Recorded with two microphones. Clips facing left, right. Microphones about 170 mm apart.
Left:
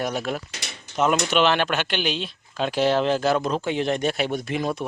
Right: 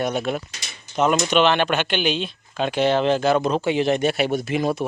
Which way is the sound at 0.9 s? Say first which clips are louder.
Right 2 dB; 70° left (ahead or behind).